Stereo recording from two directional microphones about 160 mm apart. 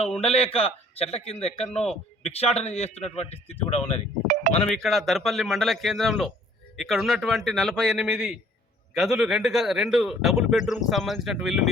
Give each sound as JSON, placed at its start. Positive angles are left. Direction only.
{"t": 0.0, "sound": "a man's voice", "side_deg": 40}
{"t": 4.7, "sound": "speech", "side_deg": 0}